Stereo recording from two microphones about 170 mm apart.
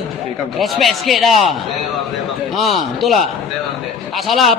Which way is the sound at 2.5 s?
Centre (ahead or behind).